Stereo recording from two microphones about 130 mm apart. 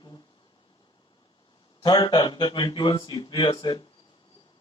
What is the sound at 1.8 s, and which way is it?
Speech, 35° left (ahead or behind).